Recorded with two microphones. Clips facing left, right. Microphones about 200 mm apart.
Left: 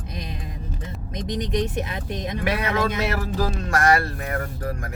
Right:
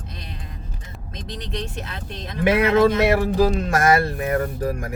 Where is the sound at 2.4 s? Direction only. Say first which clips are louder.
Right 9 dB; 25° right (ahead or behind).